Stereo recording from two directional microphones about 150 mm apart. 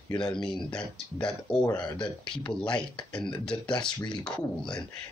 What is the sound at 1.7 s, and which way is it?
Speech, 30° left (ahead or behind).